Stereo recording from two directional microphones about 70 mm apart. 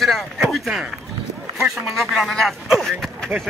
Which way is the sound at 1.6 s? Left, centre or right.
Centre.